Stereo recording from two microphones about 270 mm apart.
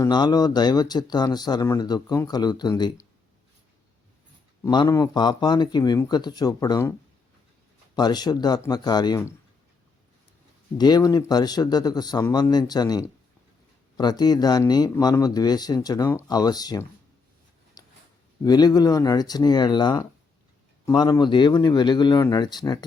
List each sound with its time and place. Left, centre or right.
0.0 s speech: centre
4.6 s speech: centre
7.9 s speech: centre
10.8 s speech: centre
17.8 s a sound: centre
18.4 s speech: centre